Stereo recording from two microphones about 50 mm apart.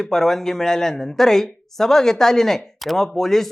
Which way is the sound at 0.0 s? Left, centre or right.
Centre.